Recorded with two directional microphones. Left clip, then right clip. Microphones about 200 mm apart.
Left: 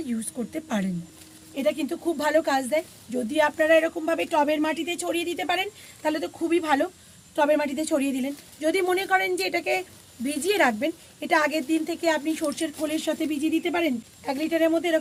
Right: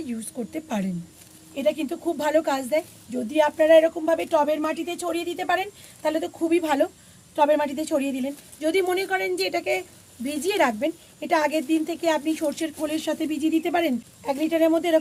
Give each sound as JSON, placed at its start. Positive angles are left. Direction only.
{"t": 0.0, "sound": "speech", "side_deg": 0}
{"t": 7.3, "sound": "a woman's voice", "side_deg": 10}